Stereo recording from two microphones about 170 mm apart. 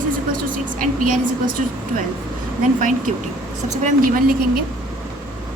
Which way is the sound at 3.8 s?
55° right (ahead or behind).